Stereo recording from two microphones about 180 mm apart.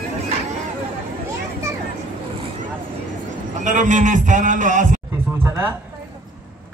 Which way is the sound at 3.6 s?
45° right (ahead or behind).